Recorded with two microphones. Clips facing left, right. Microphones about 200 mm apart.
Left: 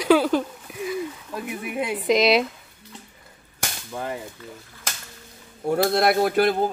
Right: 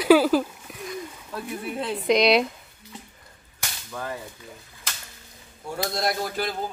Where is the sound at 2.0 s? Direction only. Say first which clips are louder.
Even; centre (ahead or behind).